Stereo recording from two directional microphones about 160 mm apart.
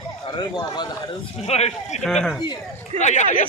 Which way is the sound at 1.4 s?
40° left (ahead or behind).